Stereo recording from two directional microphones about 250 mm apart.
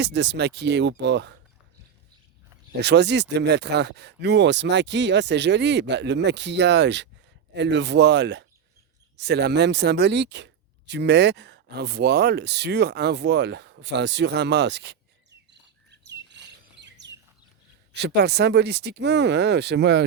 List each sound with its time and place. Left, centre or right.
0.0 s speech: right
2.8 s speech: right